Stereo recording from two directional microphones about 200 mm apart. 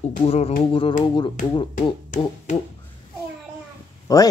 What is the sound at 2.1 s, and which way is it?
Finger snapping, 40° left (ahead or behind).